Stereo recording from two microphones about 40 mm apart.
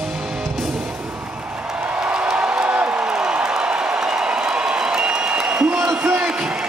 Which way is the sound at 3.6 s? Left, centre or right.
Right.